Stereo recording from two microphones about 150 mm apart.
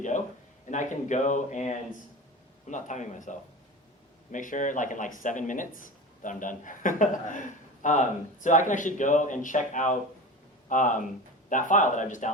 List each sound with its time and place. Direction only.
0.7 s speech: 55° left (ahead or behind)